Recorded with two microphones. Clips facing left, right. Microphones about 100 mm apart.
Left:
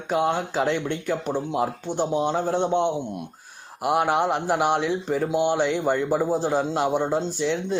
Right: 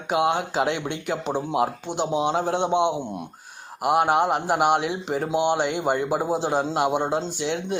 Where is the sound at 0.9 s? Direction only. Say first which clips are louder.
Left 1 dB; 80° right.